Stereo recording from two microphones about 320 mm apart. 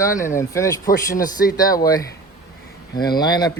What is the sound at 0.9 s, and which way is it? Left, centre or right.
Speech, left.